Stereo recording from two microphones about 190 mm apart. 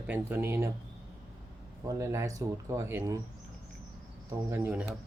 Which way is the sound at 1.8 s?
15° right (ahead or behind).